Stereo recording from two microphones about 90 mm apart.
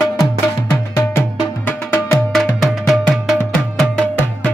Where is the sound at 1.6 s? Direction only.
25° left (ahead or behind).